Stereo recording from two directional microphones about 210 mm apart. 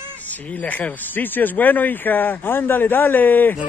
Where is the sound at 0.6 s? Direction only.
5° left (ahead or behind).